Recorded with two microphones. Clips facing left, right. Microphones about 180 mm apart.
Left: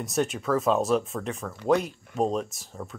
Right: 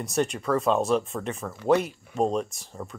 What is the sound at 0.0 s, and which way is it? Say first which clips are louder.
Speech: right 1 dB; centre (ahead or behind).